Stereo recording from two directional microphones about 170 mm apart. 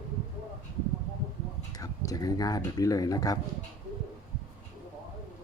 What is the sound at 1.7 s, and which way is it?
Speech, 20° left (ahead or behind).